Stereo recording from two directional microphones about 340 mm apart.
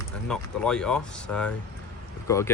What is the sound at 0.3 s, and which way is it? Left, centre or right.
Speech, centre.